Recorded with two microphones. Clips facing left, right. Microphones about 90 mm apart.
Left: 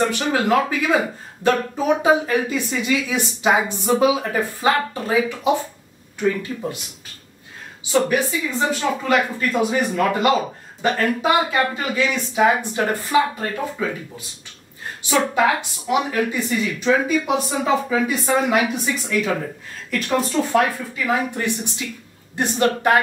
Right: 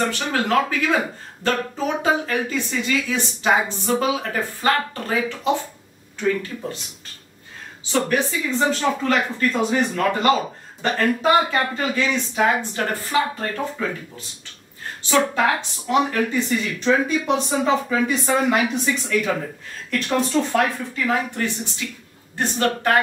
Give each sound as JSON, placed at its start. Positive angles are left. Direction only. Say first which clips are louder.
{"t": 0.2, "sound": "speech", "louder": "left 2 dB", "side_deg": 10}
{"t": 7.9, "sound": "speech", "louder": "left 2 dB", "side_deg": 5}
{"t": 15.3, "sound": "speech", "louder": "left 2 dB", "side_deg": 10}